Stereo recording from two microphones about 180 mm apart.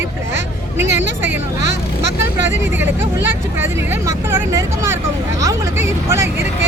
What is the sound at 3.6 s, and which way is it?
Speech, 10° right (ahead or behind).